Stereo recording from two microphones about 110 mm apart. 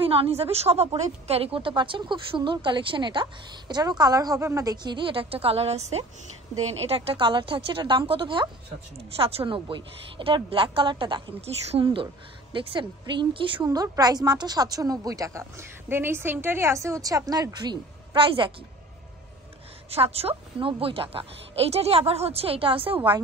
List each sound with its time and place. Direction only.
0.0 s a woman's voice: 60° right (ahead or behind); by 4.7 s 30° right (ahead or behind)
4.8 s a woman's voice: 50° right (ahead or behind); by 6.0 s 75° right (ahead or behind)
6.8 s a woman's voice: 60° right (ahead or behind)
11.4 s a woman's voice: 60° right (ahead or behind)
13.7 s a woman's voice: 35° right (ahead or behind); by 18.5 s 50° right (ahead or behind)
19.9 s a woman's voice: 65° right (ahead or behind)